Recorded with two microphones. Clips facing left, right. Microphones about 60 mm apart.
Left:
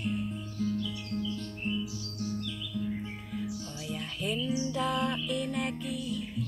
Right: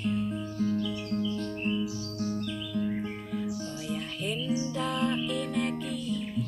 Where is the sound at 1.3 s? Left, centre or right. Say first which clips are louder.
Right 4 dB; right.